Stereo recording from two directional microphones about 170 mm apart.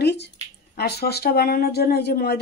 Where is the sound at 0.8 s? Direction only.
70° left (ahead or behind).